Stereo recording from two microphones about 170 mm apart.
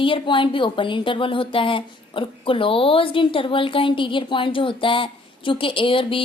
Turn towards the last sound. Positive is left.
turn(degrees=30)  # may be behind; listen again after turning